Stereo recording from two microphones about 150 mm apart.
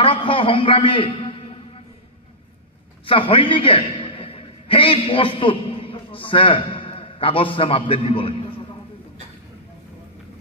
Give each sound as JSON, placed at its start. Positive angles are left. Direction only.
{"t": 0.0, "sound": "a man's voice", "side_deg": 35}
{"t": 3.1, "sound": "a man's voice", "side_deg": 35}